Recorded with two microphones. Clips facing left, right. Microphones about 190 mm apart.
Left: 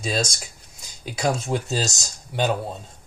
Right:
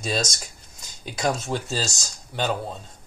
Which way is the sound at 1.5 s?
15° left (ahead or behind).